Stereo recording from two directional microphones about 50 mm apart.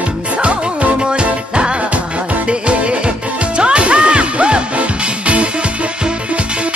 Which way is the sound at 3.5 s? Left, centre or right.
Right.